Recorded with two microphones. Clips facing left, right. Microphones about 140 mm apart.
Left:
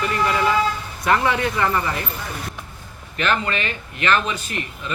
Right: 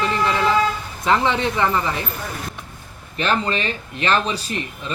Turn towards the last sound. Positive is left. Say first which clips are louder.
# right 1 dB
turn(degrees=-30)  # may be behind; listen again after turning